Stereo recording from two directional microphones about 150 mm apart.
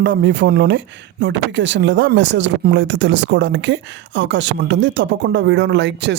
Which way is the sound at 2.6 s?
90° right.